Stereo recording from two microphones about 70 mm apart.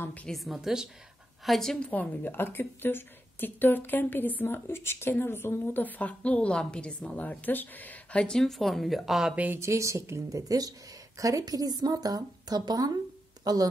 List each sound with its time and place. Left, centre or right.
0.0 s a woman's voice: left
0.3 s speech: centre
1.8 s a woman's voice: left
8.4 s speech: centre
9.3 s speech: right
9.6 s speech: right
13.4 s a sound: right